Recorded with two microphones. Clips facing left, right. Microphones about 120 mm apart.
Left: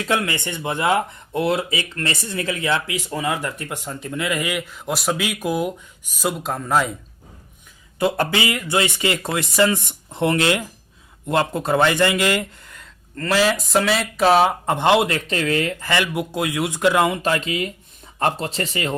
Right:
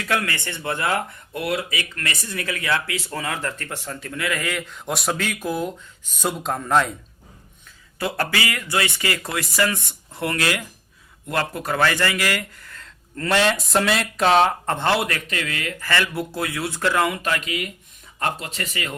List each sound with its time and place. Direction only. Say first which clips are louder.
0.0 s speech: left 3 dB; 20° left (ahead or behind)
4.7 s speech: left 2 dB; centre (ahead or behind)
6.1 s speech: left 1 dB; centre (ahead or behind)
7.9 s speech: left 5 dB; 20° left (ahead or behind)
13.1 s speech: left 1 dB; centre (ahead or behind); by 15.9 s 30° left (ahead or behind)
15.9 s speech: left 2 dB; 15° left (ahead or behind)